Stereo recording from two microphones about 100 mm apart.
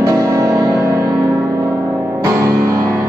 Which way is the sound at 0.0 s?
30° right (ahead or behind).